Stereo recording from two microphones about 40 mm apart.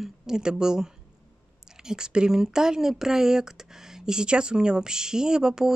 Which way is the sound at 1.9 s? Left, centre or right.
Centre.